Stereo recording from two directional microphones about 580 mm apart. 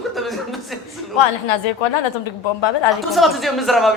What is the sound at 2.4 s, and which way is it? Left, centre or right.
Speech, left.